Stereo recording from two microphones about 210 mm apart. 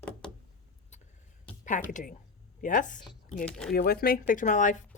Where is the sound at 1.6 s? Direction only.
35° left (ahead or behind).